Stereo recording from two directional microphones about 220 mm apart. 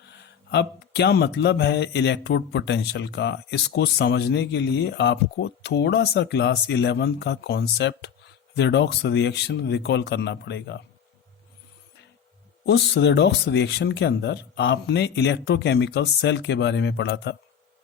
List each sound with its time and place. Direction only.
0.5 s speech: 50° left (ahead or behind)
12.6 s speech: 50° left (ahead or behind)